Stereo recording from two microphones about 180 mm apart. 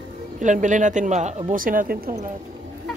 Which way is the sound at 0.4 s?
45° right (ahead or behind).